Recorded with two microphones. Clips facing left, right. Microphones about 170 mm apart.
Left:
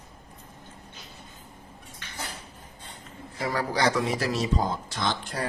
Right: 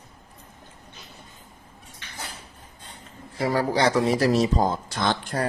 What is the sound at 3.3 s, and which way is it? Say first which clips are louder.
Speech: right 5 dB; 30° right (ahead or behind).